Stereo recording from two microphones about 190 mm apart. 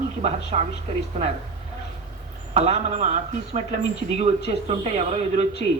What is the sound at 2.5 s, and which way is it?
A man's voice, 40° right (ahead or behind).